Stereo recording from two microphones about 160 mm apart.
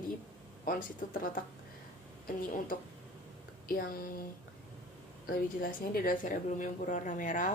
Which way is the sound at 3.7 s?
65° left (ahead or behind).